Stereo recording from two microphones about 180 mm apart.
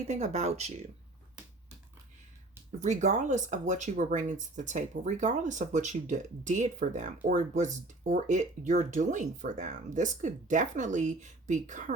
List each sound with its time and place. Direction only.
0.1 s speech: 40° right (ahead or behind)
2.8 s speech: 40° right (ahead or behind)